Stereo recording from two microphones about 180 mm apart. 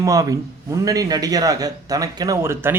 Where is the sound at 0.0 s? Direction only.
20° right (ahead or behind).